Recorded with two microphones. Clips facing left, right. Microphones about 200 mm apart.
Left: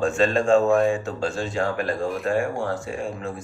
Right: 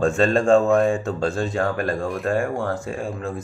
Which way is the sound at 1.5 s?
55° right (ahead or behind).